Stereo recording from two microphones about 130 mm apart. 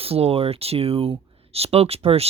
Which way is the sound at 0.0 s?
50° right (ahead or behind).